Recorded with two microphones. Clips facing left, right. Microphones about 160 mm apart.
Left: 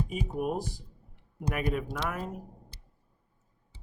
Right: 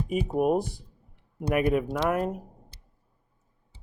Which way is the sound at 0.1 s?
55° right (ahead or behind).